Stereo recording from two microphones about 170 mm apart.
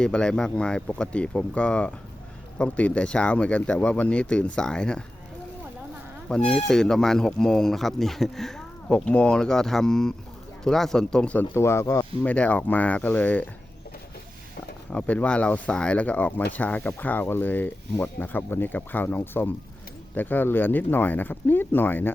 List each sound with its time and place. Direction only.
0.0 s speech: 5° left (ahead or behind)
6.4 s speech: 40° left (ahead or behind)
6.7 s speech: 5° left (ahead or behind)
14.9 s speech: 10° left (ahead or behind)